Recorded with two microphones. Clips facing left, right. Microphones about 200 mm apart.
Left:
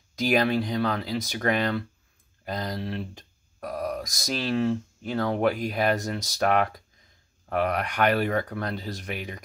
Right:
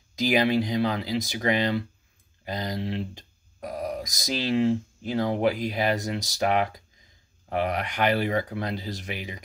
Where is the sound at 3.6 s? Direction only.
20° right (ahead or behind).